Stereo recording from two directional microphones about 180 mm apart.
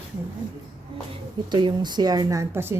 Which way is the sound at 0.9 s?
25° right (ahead or behind).